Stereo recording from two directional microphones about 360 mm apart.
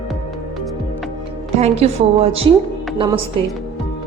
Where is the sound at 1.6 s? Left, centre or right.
Centre.